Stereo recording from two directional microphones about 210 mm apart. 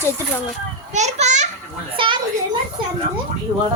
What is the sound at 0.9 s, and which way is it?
Speech, 35° right (ahead or behind).